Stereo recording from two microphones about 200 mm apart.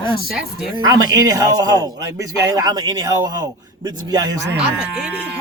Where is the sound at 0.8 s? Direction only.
20° right (ahead or behind).